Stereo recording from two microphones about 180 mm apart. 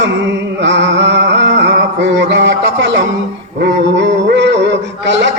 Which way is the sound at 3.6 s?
75° right (ahead or behind).